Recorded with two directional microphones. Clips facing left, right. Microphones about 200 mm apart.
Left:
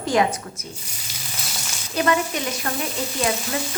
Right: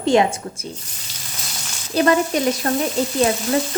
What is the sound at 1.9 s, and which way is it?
Speech, 35° right (ahead or behind).